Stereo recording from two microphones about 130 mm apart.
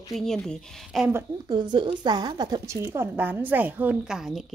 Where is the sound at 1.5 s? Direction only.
35° right (ahead or behind).